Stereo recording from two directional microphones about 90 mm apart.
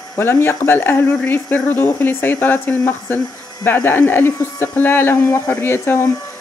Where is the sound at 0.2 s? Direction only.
25° left (ahead or behind).